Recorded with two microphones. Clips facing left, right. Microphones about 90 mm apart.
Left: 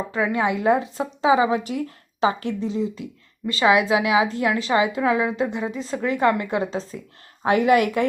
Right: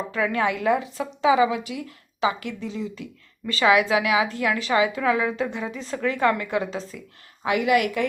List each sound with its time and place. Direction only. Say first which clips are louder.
0.1 s a woman's voice: left 1 dB; 20° left (ahead or behind)